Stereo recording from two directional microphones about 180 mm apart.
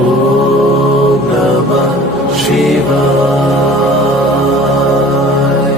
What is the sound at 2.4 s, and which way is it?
Music, centre (ahead or behind).